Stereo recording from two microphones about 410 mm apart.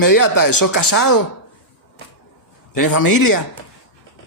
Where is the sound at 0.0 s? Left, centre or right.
Left.